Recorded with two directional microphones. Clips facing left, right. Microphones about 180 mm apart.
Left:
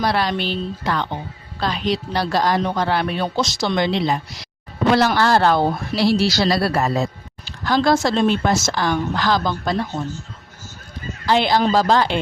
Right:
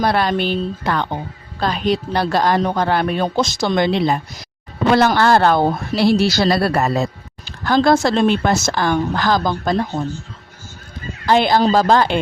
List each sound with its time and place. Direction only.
0.0 s a woman's voice: 50° right (ahead or behind)
7.4 s a sound: 50° right (ahead or behind)
7.9 s a woman's voice: 60° right (ahead or behind)
11.3 s a woman's voice: 50° right (ahead or behind)